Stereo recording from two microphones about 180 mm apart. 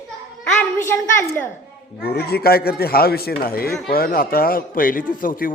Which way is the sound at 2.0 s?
60° left (ahead or behind).